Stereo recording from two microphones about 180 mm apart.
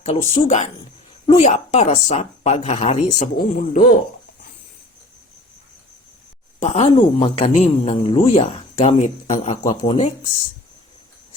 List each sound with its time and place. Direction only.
0.0 s a woman's voice: 35° left (ahead or behind)
3.3 s speech: 50° left (ahead or behind)
6.6 s a woman's voice: 35° left (ahead or behind)
9.6 s speech: 30° left (ahead or behind)